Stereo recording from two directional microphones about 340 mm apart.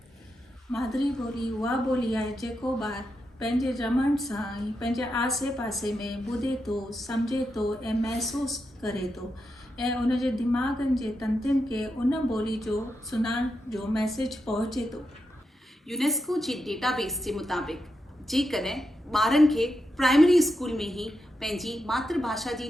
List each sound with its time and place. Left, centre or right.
0.7 s a woman's voice: centre